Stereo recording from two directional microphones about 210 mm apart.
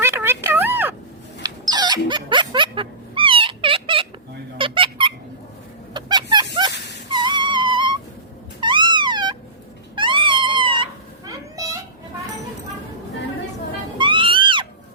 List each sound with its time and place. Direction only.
0.0 s a sound: 10° right (ahead or behind)
4.5 s squeak: 25° right (ahead or behind)
5.9 s a sound: 20° right (ahead or behind)
8.6 s cat: 20° right (ahead or behind)
11.3 s children playing: 15° right (ahead or behind)
14.0 s music: 25° right (ahead or behind)